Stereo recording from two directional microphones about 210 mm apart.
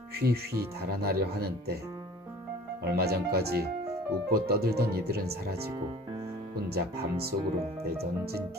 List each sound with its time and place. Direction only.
0.2 s speech: 50° right (ahead or behind)
2.8 s speech: 50° right (ahead or behind)